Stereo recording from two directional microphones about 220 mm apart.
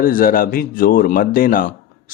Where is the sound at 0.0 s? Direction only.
40° left (ahead or behind).